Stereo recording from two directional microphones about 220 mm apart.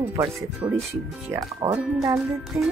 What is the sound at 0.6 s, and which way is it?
Speech, 20° right (ahead or behind).